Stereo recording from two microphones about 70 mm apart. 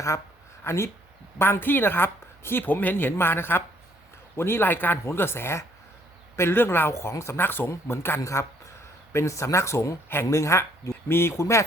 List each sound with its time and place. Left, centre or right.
0.6 s a woman's voice: left
8.2 s speech: left